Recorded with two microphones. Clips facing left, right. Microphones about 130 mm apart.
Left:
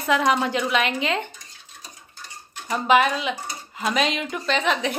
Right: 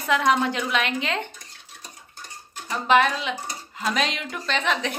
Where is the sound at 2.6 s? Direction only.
10° left (ahead or behind).